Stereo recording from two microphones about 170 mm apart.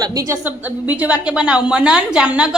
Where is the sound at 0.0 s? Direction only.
20° right (ahead or behind).